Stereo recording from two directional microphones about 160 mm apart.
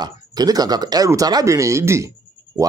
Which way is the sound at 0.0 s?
25° right (ahead or behind).